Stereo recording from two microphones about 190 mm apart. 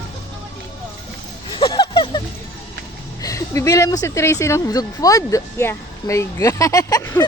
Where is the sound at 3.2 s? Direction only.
15° left (ahead or behind).